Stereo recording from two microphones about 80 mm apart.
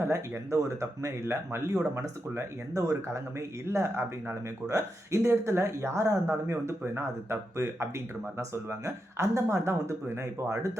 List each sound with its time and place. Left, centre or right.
0.0 s speech: right